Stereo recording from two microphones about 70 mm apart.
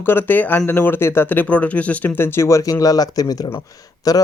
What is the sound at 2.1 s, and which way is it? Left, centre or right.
Speech, left.